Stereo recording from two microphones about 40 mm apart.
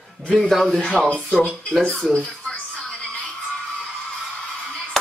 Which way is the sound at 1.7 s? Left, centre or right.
Centre.